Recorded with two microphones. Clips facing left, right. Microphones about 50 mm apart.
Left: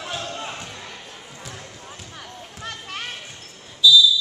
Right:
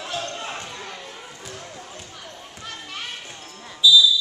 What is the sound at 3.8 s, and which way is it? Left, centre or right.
Basketball bounce, centre.